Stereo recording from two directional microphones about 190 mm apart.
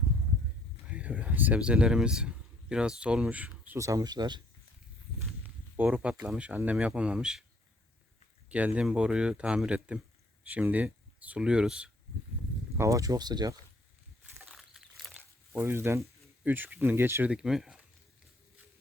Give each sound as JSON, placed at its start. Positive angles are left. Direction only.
{"t": 0.9, "sound": "speech", "side_deg": -5}
{"t": 5.7, "sound": "speech", "side_deg": -5}
{"t": 8.4, "sound": "speech", "side_deg": -5}
{"t": 12.7, "sound": "speech", "side_deg": -15}
{"t": 14.3, "sound": "a sound", "side_deg": 0}